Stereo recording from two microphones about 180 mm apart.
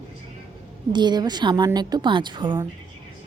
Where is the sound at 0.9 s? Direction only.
25° right (ahead or behind).